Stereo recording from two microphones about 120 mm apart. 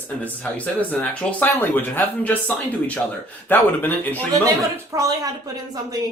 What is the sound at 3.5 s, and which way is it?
Speech, 15° left (ahead or behind).